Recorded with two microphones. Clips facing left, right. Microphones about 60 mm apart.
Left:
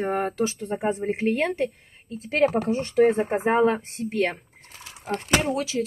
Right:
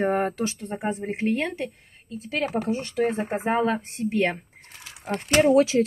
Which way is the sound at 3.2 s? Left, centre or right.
Left.